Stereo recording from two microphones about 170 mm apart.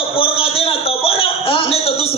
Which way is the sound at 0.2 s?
35° left (ahead or behind).